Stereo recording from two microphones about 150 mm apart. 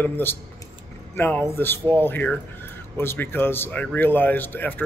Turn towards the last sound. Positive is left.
turn(degrees=10)  # may be behind; listen again after turning